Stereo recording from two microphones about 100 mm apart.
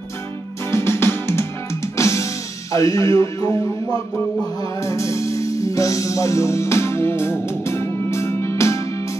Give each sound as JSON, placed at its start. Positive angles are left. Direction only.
{"t": 0.7, "sound": "music", "side_deg": 25}
{"t": 4.6, "sound": "music", "side_deg": 30}